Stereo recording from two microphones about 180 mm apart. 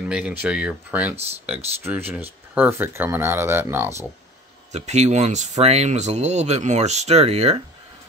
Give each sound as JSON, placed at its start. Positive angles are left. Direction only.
{"t": 0.1, "sound": "speech", "side_deg": -5}
{"t": 4.7, "sound": "speech", "side_deg": -40}